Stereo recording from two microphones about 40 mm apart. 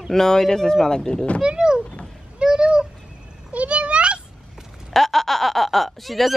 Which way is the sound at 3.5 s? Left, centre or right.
Right.